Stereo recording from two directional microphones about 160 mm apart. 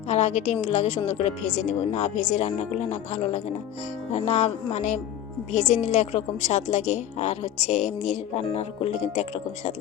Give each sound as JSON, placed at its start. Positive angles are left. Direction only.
{"t": 0.1, "sound": "a woman's voice", "side_deg": 45}